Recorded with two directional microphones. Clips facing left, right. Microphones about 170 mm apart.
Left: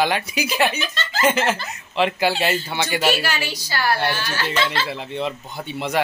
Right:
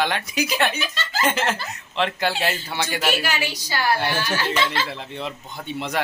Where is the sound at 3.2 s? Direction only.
15° right (ahead or behind).